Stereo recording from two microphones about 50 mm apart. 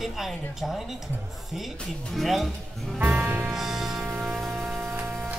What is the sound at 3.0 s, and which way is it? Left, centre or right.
Music, right.